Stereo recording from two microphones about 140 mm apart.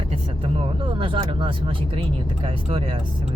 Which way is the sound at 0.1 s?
40° right (ahead or behind).